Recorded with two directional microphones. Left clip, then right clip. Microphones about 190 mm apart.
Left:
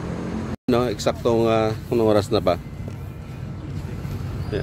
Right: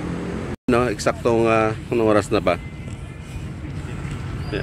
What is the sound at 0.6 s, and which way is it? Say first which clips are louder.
Speech: right 2 dB; centre (ahead or behind).